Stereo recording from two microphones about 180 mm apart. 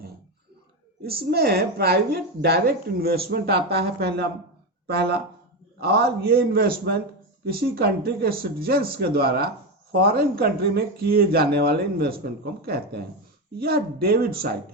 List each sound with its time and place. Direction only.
1.0 s a woman's voice: 60° right (ahead or behind)